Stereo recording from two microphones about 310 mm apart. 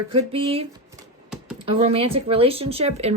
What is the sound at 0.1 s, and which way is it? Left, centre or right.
A woman's voice, centre.